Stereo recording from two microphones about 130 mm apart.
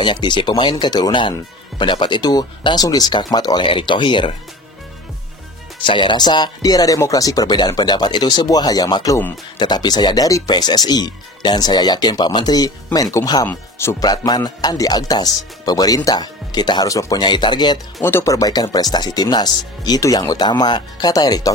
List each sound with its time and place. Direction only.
0.0 s speech: 35° left (ahead or behind)
5.8 s speech: 40° left (ahead or behind); by 14.0 s 20° left (ahead or behind)
14.0 s speech: 30° left (ahead or behind)
18.0 s speech: 20° left (ahead or behind)